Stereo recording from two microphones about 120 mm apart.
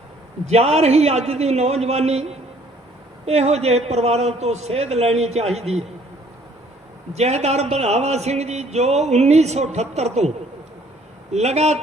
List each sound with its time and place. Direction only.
0.4 s a man's voice: 65° right (ahead or behind)
7.1 s a man's voice: 65° right (ahead or behind)